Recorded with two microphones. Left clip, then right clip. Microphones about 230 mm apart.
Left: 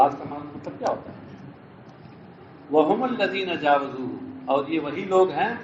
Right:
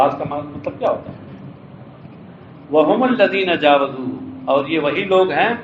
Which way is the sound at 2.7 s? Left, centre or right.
Right.